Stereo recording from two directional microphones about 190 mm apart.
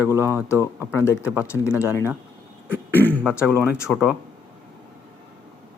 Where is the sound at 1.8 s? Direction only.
15° left (ahead or behind).